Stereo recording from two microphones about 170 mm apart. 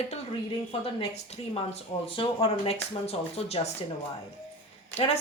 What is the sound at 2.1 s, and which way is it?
A woman's voice, 30° left (ahead or behind).